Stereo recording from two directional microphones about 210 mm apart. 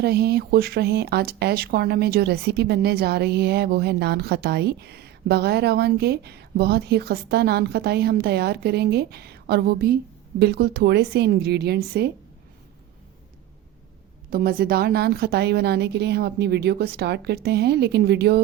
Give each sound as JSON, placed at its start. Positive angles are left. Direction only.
{"t": 0.0, "sound": "speech", "side_deg": -50}
{"t": 14.3, "sound": "speech", "side_deg": -45}